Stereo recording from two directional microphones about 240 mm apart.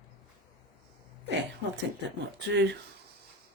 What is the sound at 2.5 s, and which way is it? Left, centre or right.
Speech, right.